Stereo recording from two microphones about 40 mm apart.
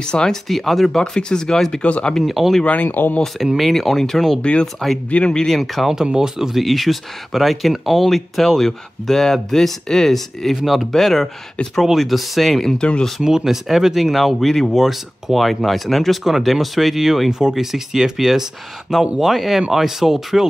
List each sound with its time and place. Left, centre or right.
0.0 s speech: left
0.3 s speech: centre
0.9 s speech: centre
1.8 s speech: left
2.2 s speech: centre
2.6 s speech: left
2.9 s speech: left
3.5 s speech: centre
4.4 s speech: left
5.3 s speech: centre
6.1 s speech: centre
12.6 s speech: left
13.2 s speech: centre